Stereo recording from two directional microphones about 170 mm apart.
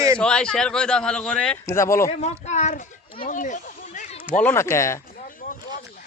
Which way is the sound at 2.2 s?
40° left (ahead or behind).